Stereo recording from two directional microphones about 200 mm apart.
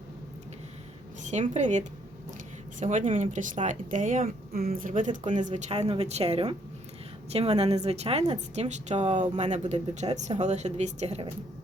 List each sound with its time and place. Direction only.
1.2 s speech: 35° right (ahead or behind)